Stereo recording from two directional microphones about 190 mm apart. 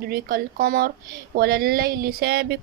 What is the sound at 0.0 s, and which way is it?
A woman's voice, 50° right (ahead or behind).